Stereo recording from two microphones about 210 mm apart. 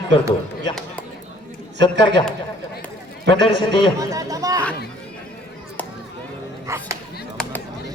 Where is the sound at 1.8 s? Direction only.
20° left (ahead or behind).